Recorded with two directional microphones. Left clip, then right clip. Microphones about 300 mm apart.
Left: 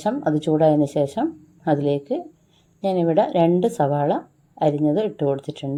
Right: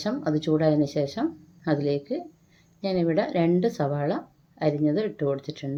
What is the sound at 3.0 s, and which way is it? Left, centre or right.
Speech, centre.